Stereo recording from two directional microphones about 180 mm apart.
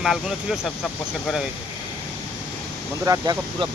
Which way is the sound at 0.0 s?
Centre (ahead or behind).